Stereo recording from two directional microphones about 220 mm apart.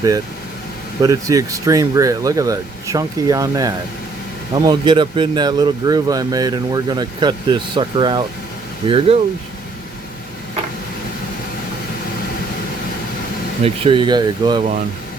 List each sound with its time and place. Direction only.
1.0 s speech: 15° right (ahead or behind)
13.6 s speech: 25° right (ahead or behind)